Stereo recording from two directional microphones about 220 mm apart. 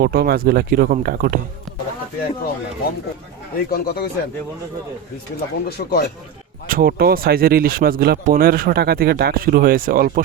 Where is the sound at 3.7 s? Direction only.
45° left (ahead or behind).